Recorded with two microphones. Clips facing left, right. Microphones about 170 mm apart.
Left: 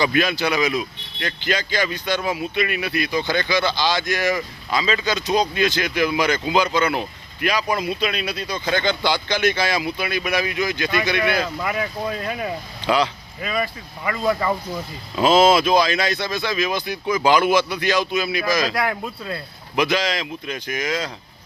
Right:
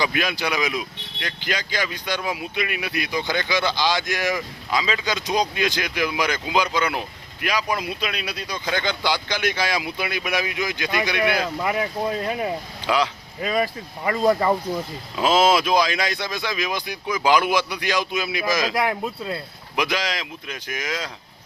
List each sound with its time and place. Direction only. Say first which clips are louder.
0.0 s speech: left 4 dB; 10° right (ahead or behind)
11.6 s speech: right 1 dB; 25° right (ahead or behind)
12.8 s speech: left 2 dB; 10° right (ahead or behind)
13.4 s speech: right 2 dB; 35° right (ahead or behind)
14.7 s speech: right 2 dB; 5° right (ahead or behind)